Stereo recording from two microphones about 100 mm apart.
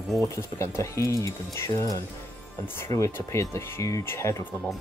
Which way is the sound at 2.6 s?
25° left (ahead or behind).